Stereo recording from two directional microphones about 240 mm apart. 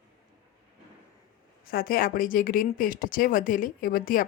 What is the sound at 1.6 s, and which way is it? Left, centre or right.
Speech, left.